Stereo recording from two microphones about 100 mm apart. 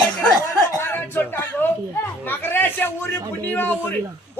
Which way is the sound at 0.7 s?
20° left (ahead or behind).